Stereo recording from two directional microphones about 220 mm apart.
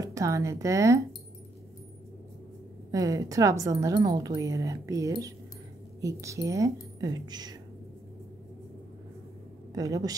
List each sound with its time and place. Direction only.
0.0 s speech: 15° right (ahead or behind)
2.9 s a woman's voice: 15° right (ahead or behind)
9.8 s a woman's voice: 15° right (ahead or behind)